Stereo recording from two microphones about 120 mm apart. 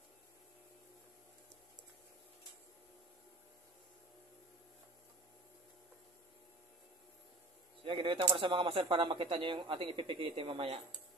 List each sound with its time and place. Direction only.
7.8 s a man's voice: 45° right (ahead or behind)